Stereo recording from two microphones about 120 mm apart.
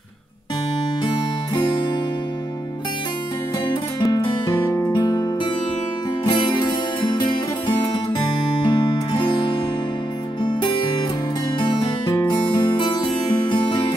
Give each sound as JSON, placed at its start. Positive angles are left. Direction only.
{"t": 1.0, "sound": "music", "side_deg": 40}
{"t": 3.6, "sound": "music", "side_deg": 35}
{"t": 12.1, "sound": "music", "side_deg": 25}
{"t": 12.4, "sound": "music", "side_deg": 40}